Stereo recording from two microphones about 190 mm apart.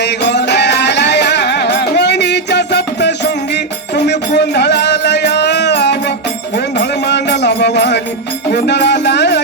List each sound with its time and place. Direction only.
0.0 s music: 65° left (ahead or behind)